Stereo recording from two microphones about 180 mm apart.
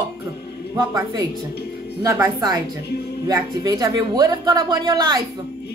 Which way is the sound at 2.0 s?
10° right (ahead or behind).